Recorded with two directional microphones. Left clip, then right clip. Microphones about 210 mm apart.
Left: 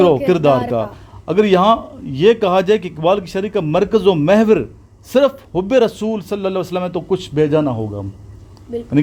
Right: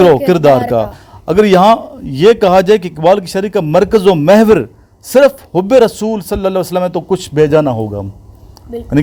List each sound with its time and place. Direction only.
0.0 s a man's voice: 35° right (ahead or behind)